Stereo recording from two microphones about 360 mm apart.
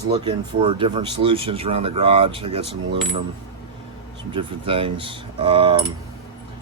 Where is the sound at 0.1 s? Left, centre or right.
Centre.